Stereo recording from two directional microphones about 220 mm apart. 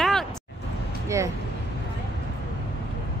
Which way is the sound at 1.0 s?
15° right (ahead or behind).